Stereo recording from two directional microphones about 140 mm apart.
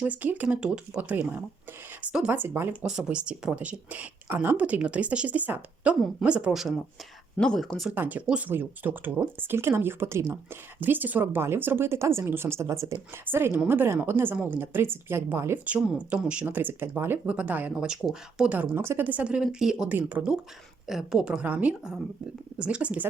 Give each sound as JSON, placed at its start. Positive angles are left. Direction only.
{"t": 0.0, "sound": "a woman's voice", "side_deg": -10}
{"t": 7.9, "sound": "a woman's voice", "side_deg": -10}